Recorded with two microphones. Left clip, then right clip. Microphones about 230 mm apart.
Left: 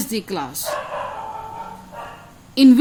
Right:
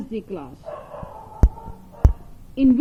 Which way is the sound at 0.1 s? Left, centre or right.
Left.